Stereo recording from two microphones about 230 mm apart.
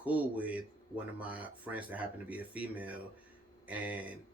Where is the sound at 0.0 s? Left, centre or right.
Centre.